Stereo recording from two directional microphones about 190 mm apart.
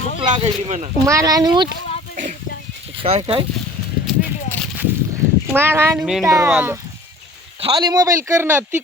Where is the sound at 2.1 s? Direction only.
45° right (ahead or behind).